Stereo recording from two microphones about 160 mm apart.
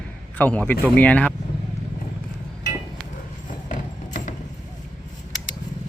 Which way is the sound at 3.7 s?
50° left (ahead or behind).